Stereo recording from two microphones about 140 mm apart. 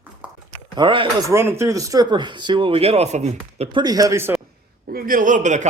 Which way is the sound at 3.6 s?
35° right (ahead or behind).